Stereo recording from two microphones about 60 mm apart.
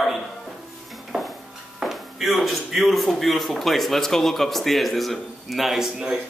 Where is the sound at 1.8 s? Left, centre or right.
Centre.